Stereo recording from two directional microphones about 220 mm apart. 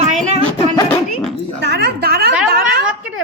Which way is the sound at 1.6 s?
50° right (ahead or behind).